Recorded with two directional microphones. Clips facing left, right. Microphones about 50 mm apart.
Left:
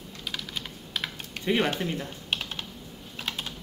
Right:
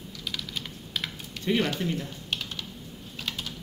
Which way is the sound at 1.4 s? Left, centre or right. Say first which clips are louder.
Left 1 dB; left.